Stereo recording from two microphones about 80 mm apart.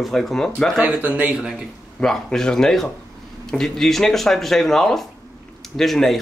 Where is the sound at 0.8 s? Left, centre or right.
Centre.